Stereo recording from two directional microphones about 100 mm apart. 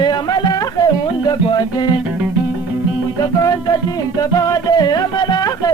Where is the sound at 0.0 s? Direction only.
45° left (ahead or behind).